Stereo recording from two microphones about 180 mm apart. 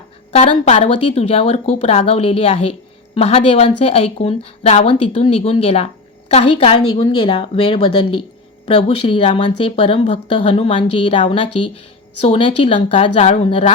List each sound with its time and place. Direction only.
0.3 s a woman's voice: 30° left (ahead or behind)